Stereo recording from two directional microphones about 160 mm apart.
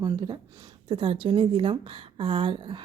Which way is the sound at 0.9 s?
35° right (ahead or behind).